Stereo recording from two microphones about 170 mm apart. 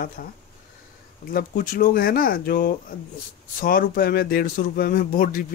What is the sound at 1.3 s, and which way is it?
Speech, 60° left (ahead or behind).